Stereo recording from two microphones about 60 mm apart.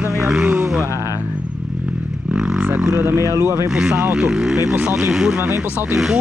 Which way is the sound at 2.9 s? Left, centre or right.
Right.